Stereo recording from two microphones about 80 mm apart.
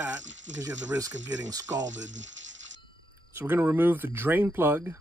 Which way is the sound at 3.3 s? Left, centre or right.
Right.